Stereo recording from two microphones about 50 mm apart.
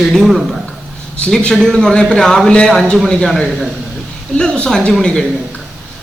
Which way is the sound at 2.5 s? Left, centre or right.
Left.